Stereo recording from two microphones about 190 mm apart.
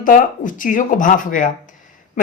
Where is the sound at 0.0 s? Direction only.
45° left (ahead or behind).